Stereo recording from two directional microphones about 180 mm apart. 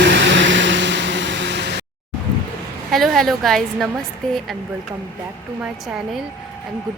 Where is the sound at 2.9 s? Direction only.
Centre (ahead or behind).